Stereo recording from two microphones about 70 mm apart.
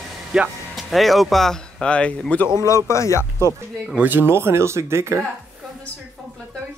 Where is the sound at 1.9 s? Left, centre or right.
Centre.